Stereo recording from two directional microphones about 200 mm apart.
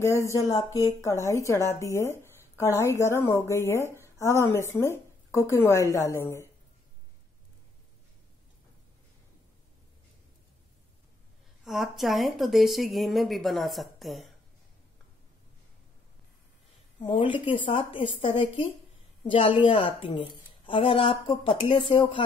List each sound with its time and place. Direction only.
0.0 s speech: 15° left (ahead or behind)
11.6 s speech: centre (ahead or behind)
17.2 s a woman's voice: 25° left (ahead or behind)